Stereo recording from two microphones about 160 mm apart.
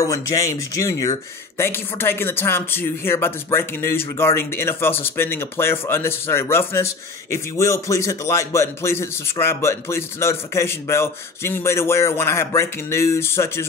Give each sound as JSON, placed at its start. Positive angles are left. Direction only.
{"t": 0.0, "sound": "speech", "side_deg": 20}